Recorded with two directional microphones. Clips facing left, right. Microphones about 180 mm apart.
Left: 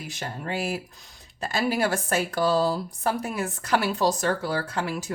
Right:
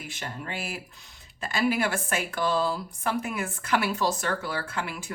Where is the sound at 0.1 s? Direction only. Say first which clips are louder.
Left 6 dB; 40° left (ahead or behind).